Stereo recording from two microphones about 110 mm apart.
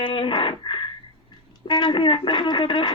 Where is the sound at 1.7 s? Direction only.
40° left (ahead or behind).